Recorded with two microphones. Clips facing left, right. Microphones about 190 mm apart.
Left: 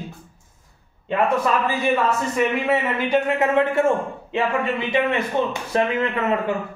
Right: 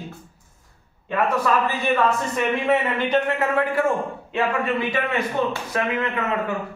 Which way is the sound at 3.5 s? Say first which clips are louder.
Left 3 dB; 25° left (ahead or behind).